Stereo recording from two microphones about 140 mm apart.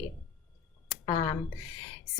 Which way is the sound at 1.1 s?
30° left (ahead or behind).